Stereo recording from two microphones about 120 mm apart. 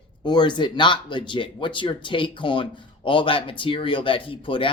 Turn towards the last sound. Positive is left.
turn(degrees=45)  # may be behind; listen again after turning